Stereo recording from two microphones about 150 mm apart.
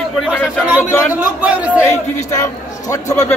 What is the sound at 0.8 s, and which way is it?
Speech, 15° left (ahead or behind).